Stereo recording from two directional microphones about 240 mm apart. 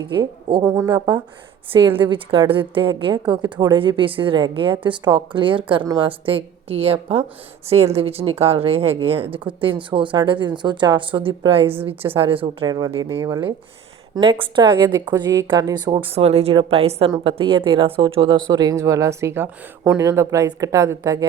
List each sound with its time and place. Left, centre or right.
0.0 s a woman's voice: centre